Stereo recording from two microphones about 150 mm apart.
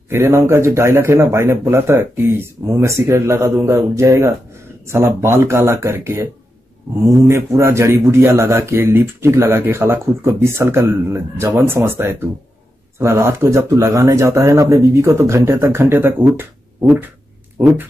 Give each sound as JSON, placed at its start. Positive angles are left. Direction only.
{"t": 0.1, "sound": "speech", "side_deg": -15}
{"t": 7.2, "sound": "speech", "side_deg": -20}